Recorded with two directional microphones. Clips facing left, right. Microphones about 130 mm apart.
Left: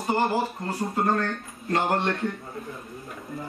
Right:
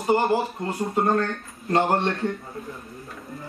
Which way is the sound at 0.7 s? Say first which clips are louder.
Right 5 dB; 25° right (ahead or behind).